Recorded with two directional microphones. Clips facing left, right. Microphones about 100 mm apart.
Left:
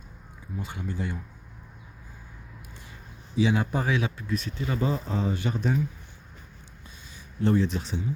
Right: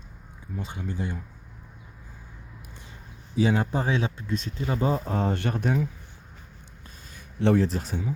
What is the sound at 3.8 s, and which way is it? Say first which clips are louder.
Speech: right 1 dB; 25° right (ahead or behind).